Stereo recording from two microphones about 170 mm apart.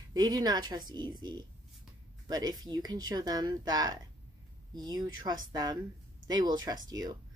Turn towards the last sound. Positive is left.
turn(degrees=-20)  # may be behind; listen again after turning